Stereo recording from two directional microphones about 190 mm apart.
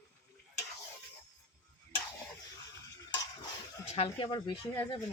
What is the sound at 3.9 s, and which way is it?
Speech, 30° left (ahead or behind).